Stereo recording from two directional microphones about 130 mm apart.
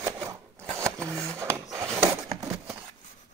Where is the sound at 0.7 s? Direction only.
25° right (ahead or behind).